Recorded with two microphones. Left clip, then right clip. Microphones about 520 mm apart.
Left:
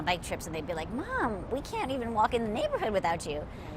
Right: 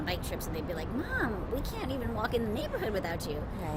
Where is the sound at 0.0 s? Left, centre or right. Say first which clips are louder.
Left 4 dB; left.